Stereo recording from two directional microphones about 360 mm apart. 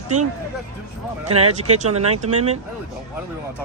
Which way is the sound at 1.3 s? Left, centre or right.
Right.